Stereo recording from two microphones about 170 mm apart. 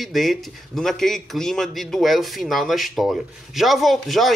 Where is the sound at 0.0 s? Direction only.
Centre (ahead or behind).